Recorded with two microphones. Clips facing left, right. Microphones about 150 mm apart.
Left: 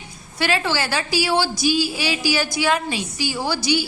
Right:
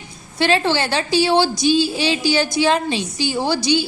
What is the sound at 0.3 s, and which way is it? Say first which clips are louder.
A woman's voice: right 4 dB; 25° right (ahead or behind).